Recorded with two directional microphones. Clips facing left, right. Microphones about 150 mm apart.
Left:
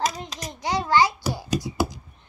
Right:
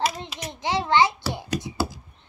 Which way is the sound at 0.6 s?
25° right (ahead or behind).